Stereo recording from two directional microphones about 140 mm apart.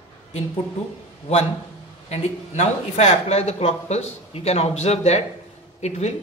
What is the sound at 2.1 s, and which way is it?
A man's voice, 55° left (ahead or behind).